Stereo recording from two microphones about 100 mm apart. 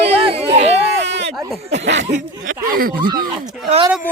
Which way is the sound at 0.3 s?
85° right.